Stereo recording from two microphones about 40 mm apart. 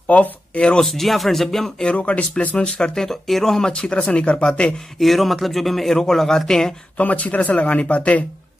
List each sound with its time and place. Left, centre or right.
0.0 s speech: left
0.8 s speech: centre
2.0 s speech: left
2.8 s a man's voice: centre
3.6 s speech: left
4.9 s a man's voice: centre
7.0 s speech: left